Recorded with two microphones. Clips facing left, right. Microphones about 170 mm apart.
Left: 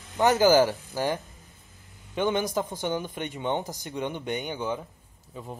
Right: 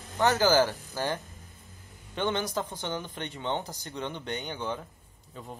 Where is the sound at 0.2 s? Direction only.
15° left (ahead or behind).